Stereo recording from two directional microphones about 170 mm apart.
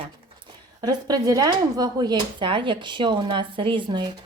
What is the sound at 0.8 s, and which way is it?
Speech, 25° right (ahead or behind).